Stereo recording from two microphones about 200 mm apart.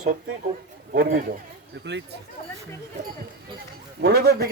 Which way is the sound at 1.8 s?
60° right (ahead or behind).